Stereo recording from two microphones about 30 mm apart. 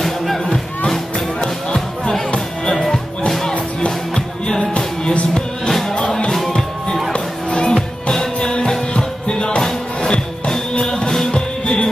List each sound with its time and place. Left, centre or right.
0.0 s music: centre
1.4 s music: left
3.5 s music: left
4.5 s music: left
7.7 s music: centre
8.4 s music: left